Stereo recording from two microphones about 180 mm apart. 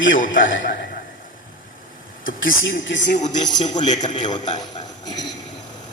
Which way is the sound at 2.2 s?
90° left.